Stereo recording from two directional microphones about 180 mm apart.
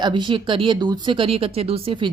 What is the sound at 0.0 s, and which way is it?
Speech, 25° right (ahead or behind).